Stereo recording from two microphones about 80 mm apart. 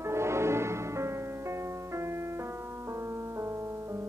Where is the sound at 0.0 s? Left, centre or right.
Right.